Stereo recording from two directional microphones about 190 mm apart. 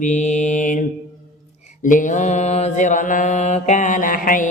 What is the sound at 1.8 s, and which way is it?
Mantra, 45° left (ahead or behind).